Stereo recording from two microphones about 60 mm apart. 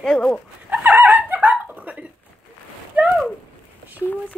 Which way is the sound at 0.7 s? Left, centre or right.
Right.